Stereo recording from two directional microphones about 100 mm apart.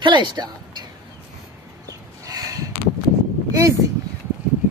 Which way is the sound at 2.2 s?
35° right (ahead or behind).